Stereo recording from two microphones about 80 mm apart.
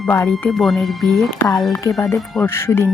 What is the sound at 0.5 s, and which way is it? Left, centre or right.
Speech, centre.